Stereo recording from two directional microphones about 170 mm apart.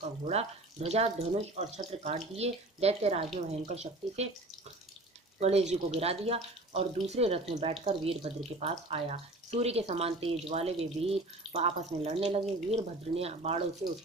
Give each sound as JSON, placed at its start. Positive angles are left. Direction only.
{"t": 0.0, "sound": "speech", "side_deg": -40}
{"t": 5.4, "sound": "speech", "side_deg": -40}